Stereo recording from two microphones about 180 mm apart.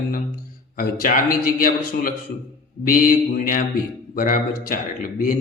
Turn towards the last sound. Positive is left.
turn(degrees=50)  # may be behind; listen again after turning